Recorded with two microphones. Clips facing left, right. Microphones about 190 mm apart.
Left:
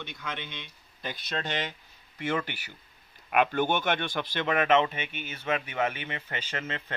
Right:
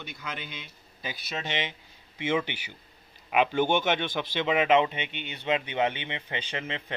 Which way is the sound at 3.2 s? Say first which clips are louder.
Right 1 dB; centre (ahead or behind).